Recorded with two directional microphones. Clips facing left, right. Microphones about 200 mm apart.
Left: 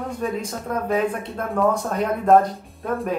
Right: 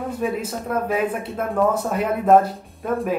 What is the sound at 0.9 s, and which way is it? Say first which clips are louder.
Speech: even; 5° right (ahead or behind).